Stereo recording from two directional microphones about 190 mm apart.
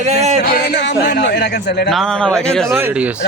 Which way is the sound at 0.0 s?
35° right (ahead or behind).